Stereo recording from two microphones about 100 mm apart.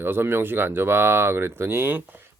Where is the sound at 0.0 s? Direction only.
20° right (ahead or behind).